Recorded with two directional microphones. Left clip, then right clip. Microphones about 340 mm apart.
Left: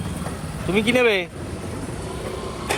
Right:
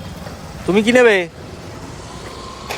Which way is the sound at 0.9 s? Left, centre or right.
Right.